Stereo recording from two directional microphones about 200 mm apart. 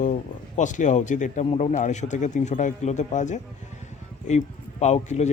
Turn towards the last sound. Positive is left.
turn(degrees=35)  # may be behind; listen again after turning